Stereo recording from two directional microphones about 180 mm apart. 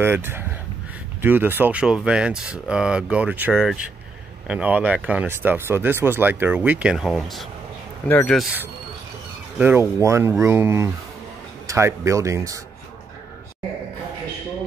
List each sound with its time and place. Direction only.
0.0 s speech: 10° right (ahead or behind); by 8.4 s 10° left (ahead or behind)
9.6 s speech: 10° right (ahead or behind)